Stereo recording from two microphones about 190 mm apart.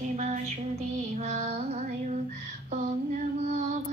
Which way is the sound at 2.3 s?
35° right (ahead or behind).